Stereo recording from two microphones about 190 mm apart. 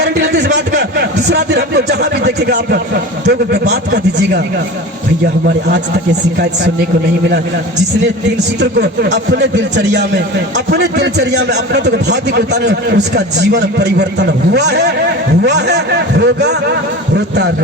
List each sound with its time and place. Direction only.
0.0 s a man's voice: 60° right (ahead or behind)
8.6 s a man's voice: 60° right (ahead or behind)